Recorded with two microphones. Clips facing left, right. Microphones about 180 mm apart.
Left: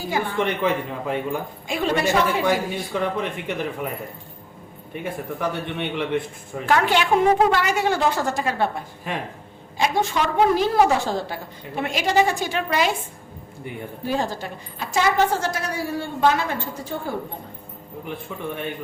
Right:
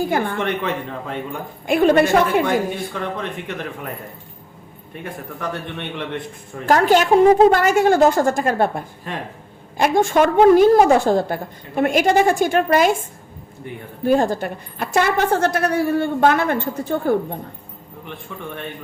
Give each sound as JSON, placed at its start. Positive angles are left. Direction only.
{"t": 0.0, "sound": "a woman's voice", "side_deg": -55}
{"t": 0.3, "sound": "speech", "side_deg": 10}
{"t": 1.6, "sound": "a woman's voice", "side_deg": -55}
{"t": 2.9, "sound": "speech", "side_deg": 10}
{"t": 5.4, "sound": "speech", "side_deg": 10}
{"t": 6.7, "sound": "a woman's voice", "side_deg": -40}